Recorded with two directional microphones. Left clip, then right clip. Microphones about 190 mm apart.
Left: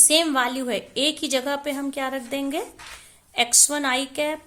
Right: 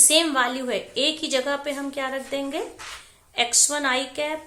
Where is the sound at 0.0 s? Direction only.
40° left (ahead or behind).